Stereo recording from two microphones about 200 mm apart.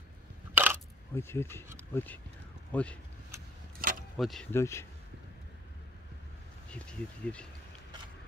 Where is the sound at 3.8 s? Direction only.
45° right (ahead or behind).